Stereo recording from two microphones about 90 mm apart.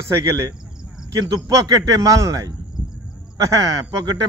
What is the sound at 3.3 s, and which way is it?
Speech, 40° right (ahead or behind).